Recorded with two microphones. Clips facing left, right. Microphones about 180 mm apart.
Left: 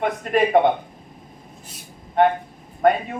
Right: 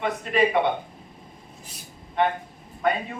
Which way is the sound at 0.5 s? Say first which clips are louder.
Left 10 dB; 50° left (ahead or behind).